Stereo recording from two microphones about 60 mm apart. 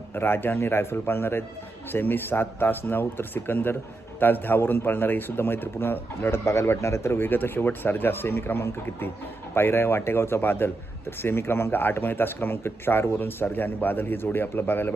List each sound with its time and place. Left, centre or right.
0.1 s speech: left
6.4 s speech: left